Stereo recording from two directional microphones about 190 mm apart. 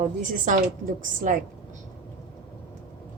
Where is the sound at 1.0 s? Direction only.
45° right (ahead or behind).